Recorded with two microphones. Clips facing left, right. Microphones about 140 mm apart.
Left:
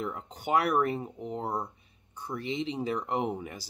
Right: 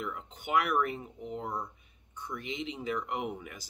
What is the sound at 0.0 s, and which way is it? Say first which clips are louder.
Speech: left 4 dB; 35° left (ahead or behind).